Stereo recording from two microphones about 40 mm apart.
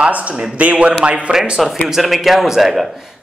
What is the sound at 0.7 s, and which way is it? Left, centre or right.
Speech, right.